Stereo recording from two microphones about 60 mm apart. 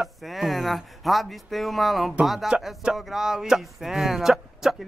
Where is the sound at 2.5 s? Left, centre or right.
Centre.